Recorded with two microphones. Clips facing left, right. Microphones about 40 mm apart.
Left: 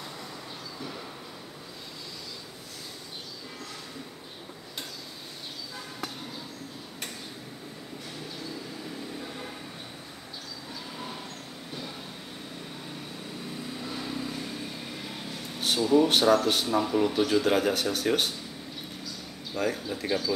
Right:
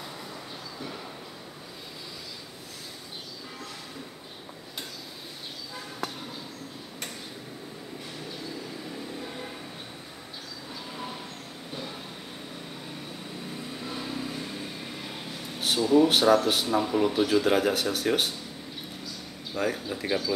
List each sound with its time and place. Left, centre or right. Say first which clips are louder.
13.8 s vehicle: right 1 dB; centre
15.0 s speech: even; centre
19.5 s speech: even; centre